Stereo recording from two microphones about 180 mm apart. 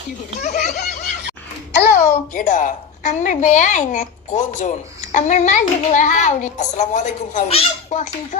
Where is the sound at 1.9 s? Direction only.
45° left (ahead or behind).